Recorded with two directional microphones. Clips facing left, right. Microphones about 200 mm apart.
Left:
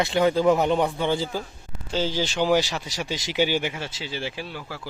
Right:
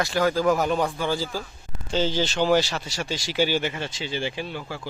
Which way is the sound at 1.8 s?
10° left (ahead or behind).